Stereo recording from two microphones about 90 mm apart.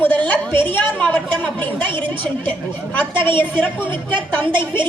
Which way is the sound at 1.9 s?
65° right (ahead or behind).